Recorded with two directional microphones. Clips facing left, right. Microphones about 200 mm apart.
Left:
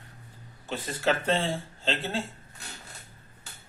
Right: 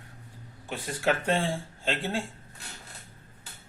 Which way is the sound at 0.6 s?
15° right (ahead or behind).